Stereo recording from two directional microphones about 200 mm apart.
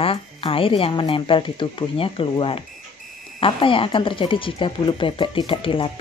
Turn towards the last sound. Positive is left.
turn(degrees=25)  # may be behind; listen again after turning